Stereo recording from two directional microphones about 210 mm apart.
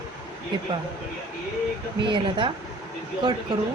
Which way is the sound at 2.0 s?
25° right (ahead or behind).